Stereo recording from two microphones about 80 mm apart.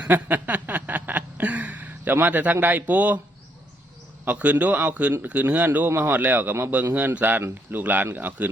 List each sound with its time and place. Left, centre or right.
0.1 s a sound: right
2.1 s speech: right
4.3 s speech: centre